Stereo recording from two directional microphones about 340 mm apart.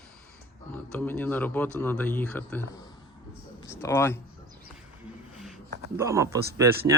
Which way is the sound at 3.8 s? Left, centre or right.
Centre.